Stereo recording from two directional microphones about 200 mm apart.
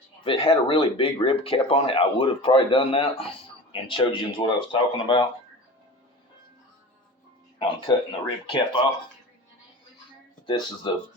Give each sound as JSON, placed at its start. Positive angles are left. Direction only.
{"t": 0.3, "sound": "speech", "side_deg": 25}
{"t": 7.9, "sound": "speech", "side_deg": 25}
{"t": 10.4, "sound": "speech", "side_deg": 25}